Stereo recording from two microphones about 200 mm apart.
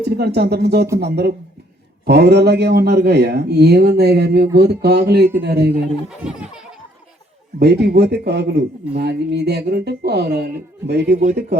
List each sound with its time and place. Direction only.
0.2 s a man's voice: 55° right (ahead or behind)
6.1 s speech: 5° right (ahead or behind)
7.6 s a man's voice: 55° right (ahead or behind)